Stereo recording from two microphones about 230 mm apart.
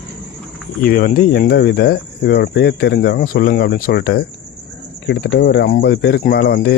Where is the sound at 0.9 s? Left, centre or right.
Left.